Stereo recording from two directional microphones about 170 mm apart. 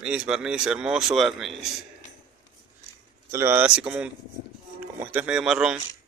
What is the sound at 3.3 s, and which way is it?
A man's voice, 15° right (ahead or behind).